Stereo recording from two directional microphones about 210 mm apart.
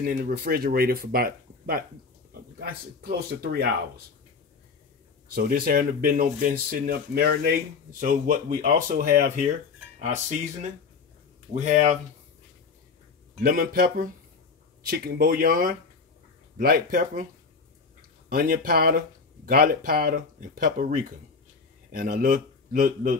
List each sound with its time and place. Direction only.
0.0 s speech: 45° right (ahead or behind)
5.3 s speech: 45° right (ahead or behind)
11.5 s speech: 35° right (ahead or behind)
13.4 s speech: 45° right (ahead or behind)
18.3 s a man's voice: 45° right (ahead or behind)